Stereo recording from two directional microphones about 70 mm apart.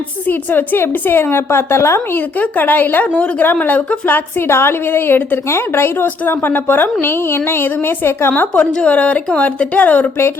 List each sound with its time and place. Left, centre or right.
0.3 s a woman's voice: left
2.1 s speech: left
4.4 s a woman's voice: left
8.3 s speech: left